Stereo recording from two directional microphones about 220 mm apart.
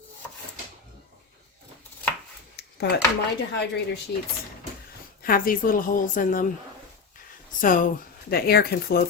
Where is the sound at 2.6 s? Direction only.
45° left (ahead or behind).